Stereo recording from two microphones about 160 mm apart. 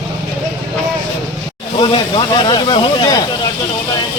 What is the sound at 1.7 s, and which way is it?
Speech, 30° left (ahead or behind).